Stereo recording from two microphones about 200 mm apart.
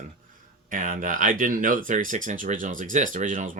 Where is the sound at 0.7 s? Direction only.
40° right (ahead or behind).